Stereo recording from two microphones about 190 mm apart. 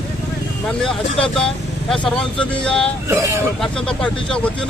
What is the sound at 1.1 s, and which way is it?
Speech, 30° left (ahead or behind).